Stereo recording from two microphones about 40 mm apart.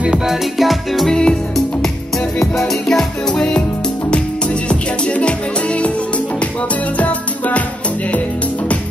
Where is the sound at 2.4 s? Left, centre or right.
Centre; by 5.9 s left.